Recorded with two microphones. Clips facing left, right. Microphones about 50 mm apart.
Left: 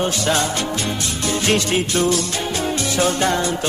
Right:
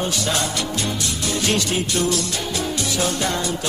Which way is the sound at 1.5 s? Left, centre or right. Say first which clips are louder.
Left 4 dB; left.